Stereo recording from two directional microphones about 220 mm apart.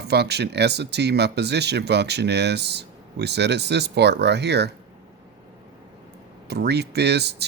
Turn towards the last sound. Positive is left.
turn(degrees=-50)  # may be behind; listen again after turning